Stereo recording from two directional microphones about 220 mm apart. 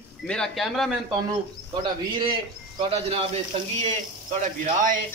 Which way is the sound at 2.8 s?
25° right (ahead or behind).